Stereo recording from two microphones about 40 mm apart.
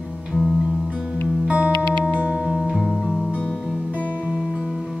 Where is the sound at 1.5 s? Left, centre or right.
Right.